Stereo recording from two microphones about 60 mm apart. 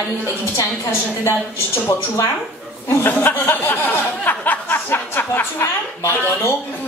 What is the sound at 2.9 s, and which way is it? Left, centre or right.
Speech, left.